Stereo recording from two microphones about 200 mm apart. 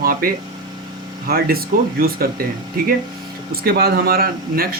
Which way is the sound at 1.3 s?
50° right (ahead or behind).